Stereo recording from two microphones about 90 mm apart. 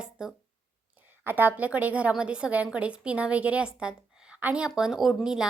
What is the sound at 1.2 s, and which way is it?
A woman's voice, 20° right (ahead or behind).